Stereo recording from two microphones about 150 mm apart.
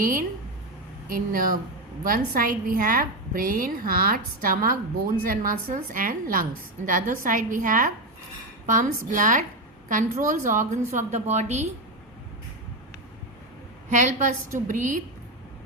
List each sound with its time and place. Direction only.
0.0 s a woman's voice: 65° right (ahead or behind)
13.9 s a woman's voice: 55° right (ahead or behind)